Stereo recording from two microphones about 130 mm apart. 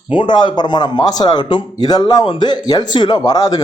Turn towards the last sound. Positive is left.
turn(degrees=30)  # may be behind; listen again after turning